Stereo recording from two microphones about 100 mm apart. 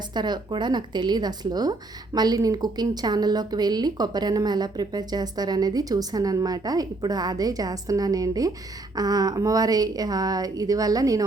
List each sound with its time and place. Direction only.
0.1 s a woman's voice: 45° right (ahead or behind)